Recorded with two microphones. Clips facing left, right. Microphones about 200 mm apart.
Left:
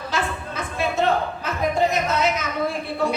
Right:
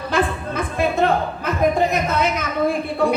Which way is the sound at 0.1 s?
55° right (ahead or behind).